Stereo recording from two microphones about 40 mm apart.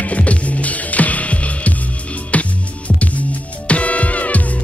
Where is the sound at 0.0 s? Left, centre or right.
Left.